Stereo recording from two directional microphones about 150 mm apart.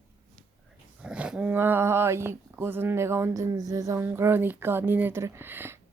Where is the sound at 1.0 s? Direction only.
5° right (ahead or behind).